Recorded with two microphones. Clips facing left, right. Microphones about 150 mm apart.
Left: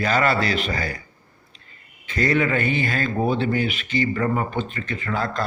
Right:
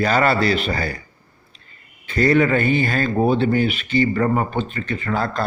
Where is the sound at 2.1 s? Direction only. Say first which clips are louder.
Right 5 dB; 35° right (ahead or behind).